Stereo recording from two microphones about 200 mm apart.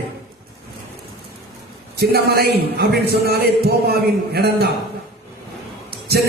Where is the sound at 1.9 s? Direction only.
55° right (ahead or behind).